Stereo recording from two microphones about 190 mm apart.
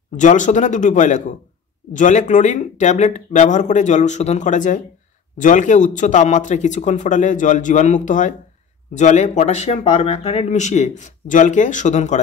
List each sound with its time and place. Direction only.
0.2 s speech: 40° left (ahead or behind)